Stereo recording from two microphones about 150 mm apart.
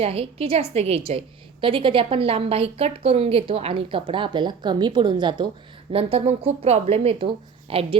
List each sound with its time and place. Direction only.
0.0 s a woman's voice: 40° right (ahead or behind)